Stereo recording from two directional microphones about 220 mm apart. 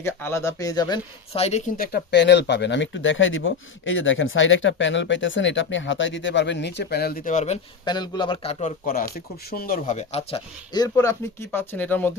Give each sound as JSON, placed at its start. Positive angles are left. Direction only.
{"t": 0.0, "sound": "speech", "side_deg": 10}
{"t": 8.9, "sound": "speech", "side_deg": 40}
{"t": 10.8, "sound": "speech", "side_deg": 15}